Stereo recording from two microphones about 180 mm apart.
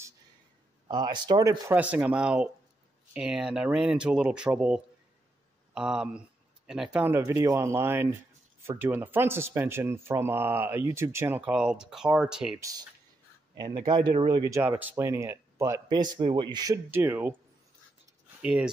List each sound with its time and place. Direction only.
0.8 s speech: 25° right (ahead or behind)
1.8 s speech: 10° right (ahead or behind)
12.5 s speech: 20° right (ahead or behind)
14.6 s speech: 10° right (ahead or behind)
18.4 s speech: 5° right (ahead or behind)